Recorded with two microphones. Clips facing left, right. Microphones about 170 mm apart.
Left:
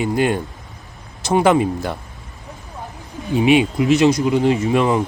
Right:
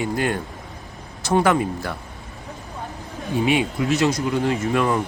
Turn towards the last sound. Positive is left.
turn(degrees=20)  # may be behind; listen again after turning